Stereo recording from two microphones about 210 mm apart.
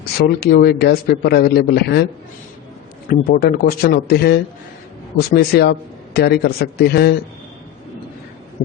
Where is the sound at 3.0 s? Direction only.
45° left (ahead or behind).